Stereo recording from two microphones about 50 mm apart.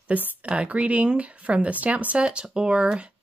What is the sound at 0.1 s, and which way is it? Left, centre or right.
Speech, right.